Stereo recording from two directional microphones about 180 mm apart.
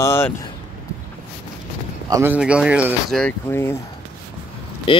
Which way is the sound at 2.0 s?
15° right (ahead or behind).